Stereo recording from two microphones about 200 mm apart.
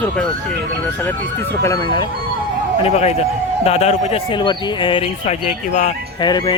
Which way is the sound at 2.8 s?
30° left (ahead or behind).